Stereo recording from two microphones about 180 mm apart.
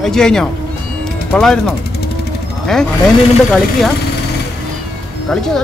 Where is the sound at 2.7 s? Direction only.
5° left (ahead or behind).